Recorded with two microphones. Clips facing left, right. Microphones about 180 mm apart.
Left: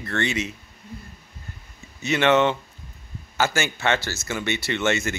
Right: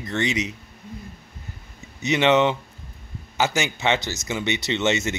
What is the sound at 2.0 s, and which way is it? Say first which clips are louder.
Speech: right 1 dB; 15° right (ahead or behind).